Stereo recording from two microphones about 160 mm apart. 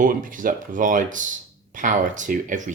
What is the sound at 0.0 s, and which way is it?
Speech, 55° right (ahead or behind).